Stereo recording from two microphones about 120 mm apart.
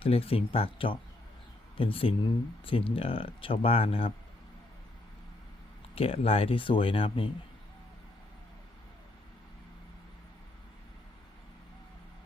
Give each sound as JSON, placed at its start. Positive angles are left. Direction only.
{"t": 0.0, "sound": "speech", "side_deg": 55}
{"t": 5.9, "sound": "speech", "side_deg": 50}